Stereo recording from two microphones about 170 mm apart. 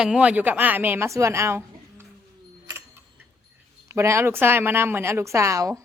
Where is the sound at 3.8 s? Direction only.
15° right (ahead or behind).